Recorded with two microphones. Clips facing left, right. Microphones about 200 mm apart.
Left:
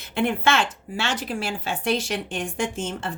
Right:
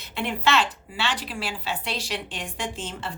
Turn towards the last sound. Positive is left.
turn(degrees=50)  # may be behind; listen again after turning